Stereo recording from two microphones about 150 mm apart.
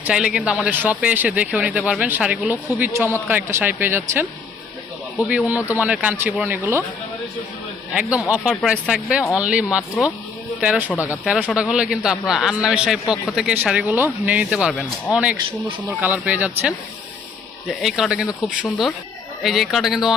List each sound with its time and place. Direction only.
0.0 s speech: 5° right (ahead or behind)
5.3 s speech: 10° right (ahead or behind)
8.3 s a man's voice: 5° right (ahead or behind)
10.8 s speech: 20° left (ahead or behind)
11.3 s a man's voice: 5° right (ahead or behind)